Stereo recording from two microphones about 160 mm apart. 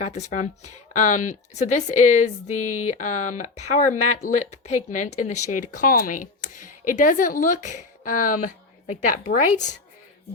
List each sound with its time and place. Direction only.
0.0 s a woman's voice: 45° left (ahead or behind)